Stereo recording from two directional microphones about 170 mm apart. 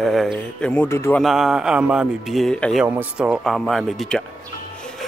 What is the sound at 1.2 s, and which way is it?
Speech, centre (ahead or behind).